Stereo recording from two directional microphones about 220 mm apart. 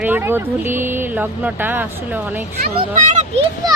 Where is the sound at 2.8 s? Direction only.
35° right (ahead or behind).